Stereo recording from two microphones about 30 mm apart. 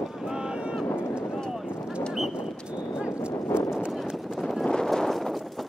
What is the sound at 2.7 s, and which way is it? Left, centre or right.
Clip-clop, right.